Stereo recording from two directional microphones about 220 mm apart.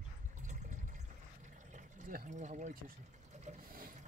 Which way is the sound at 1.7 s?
35° right (ahead or behind).